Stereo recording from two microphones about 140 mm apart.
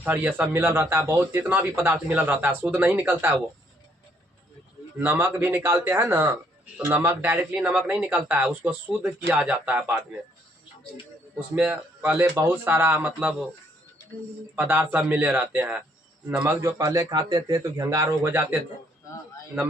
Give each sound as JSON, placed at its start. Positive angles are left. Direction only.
{"t": 0.0, "sound": "speech", "side_deg": -10}
{"t": 4.9, "sound": "speech", "side_deg": -15}
{"t": 11.3, "sound": "speech", "side_deg": -10}
{"t": 14.5, "sound": "speech", "side_deg": -15}
{"t": 16.6, "sound": "a man's voice", "side_deg": -20}